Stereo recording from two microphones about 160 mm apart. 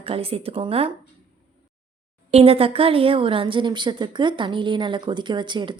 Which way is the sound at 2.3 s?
35° right (ahead or behind).